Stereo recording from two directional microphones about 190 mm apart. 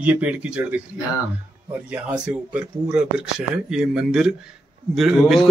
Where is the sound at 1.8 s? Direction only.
5° right (ahead or behind).